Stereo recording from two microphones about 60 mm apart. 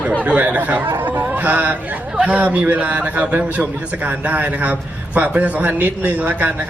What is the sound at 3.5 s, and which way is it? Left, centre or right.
Speech, right.